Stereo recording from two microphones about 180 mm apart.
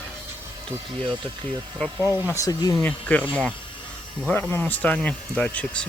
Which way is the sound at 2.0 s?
15° right (ahead or behind).